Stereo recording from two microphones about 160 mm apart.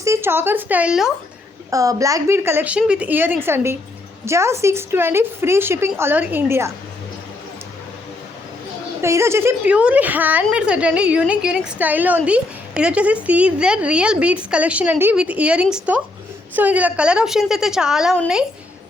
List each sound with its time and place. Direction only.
0.0 s a woman's voice: 15° right (ahead or behind)
1.7 s a woman's voice: 20° right (ahead or behind)
9.0 s a woman's voice: 15° right (ahead or behind)